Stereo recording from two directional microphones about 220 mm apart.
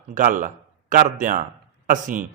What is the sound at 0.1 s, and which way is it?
A man's voice, 40° right (ahead or behind).